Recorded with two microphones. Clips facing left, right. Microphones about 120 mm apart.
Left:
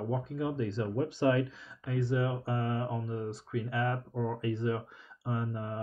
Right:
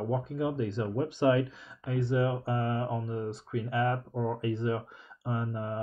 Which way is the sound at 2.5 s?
30° right (ahead or behind).